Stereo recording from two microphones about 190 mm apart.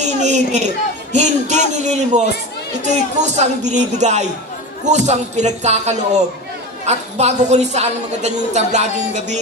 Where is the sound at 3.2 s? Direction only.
35° right (ahead or behind).